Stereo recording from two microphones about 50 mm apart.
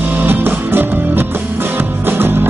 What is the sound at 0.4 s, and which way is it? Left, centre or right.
Music, right.